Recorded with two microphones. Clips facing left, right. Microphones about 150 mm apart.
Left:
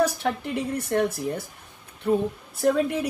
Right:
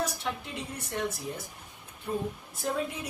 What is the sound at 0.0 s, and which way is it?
A woman's voice, 65° left (ahead or behind).